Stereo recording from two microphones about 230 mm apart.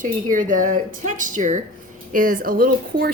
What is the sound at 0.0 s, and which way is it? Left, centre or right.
A woman's voice, right.